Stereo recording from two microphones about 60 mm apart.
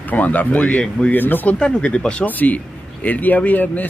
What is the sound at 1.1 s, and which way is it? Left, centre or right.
Speech, left.